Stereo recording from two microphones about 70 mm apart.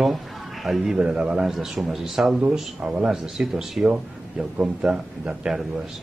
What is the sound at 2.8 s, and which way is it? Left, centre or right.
A man's voice, centre.